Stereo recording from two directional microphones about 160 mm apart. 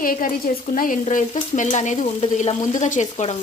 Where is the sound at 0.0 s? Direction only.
60° left (ahead or behind).